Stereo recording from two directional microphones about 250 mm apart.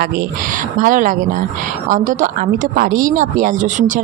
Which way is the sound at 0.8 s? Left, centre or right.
Right.